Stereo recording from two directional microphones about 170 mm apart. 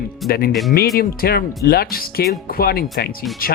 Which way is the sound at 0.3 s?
60° left (ahead or behind).